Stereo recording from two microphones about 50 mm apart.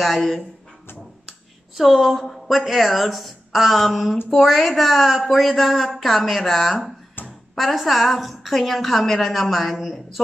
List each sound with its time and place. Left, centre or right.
1.8 s a woman's voice: centre
7.2 s a sound: left
7.5 s a woman's voice: centre